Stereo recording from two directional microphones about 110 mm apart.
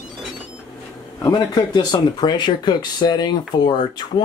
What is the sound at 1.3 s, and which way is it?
Speech, 40° left (ahead or behind).